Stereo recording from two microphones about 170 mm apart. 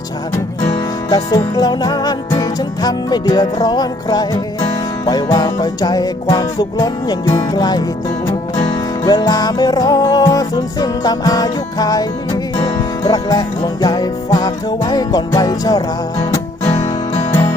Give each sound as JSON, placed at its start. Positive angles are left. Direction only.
{"t": 1.1, "sound": "music", "side_deg": 25}
{"t": 9.0, "sound": "music", "side_deg": 25}
{"t": 16.6, "sound": "music", "side_deg": 40}